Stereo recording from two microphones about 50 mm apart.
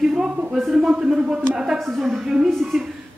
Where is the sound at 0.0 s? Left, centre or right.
Centre.